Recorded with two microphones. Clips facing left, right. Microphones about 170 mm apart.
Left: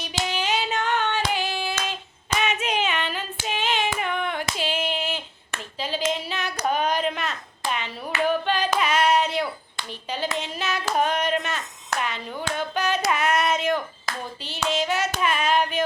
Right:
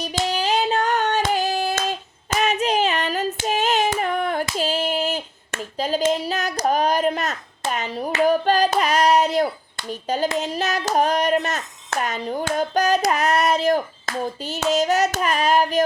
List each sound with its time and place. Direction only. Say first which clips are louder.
0.0 s hands: right 4 dB; 35° right (ahead or behind)
9.9 s speech: right 8 dB; 45° right (ahead or behind)
10.3 s hands: right 5 dB; 40° right (ahead or behind)